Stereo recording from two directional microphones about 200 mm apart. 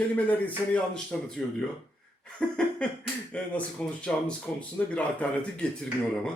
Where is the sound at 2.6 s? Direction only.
5° left (ahead or behind).